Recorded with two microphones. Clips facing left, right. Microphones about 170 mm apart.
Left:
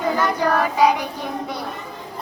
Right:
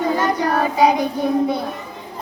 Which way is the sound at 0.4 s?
30° right (ahead or behind).